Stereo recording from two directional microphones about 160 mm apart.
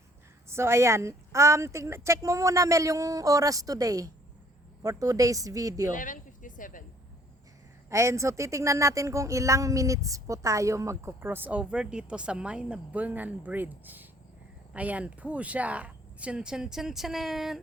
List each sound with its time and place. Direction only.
0.4 s speech: 15° right (ahead or behind)
5.9 s a sound: 55° left (ahead or behind)
7.9 s speech: 20° right (ahead or behind); by 17.6 s centre (ahead or behind)